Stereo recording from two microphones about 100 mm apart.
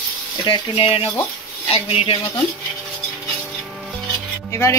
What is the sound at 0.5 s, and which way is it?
Speech, 70° left (ahead or behind).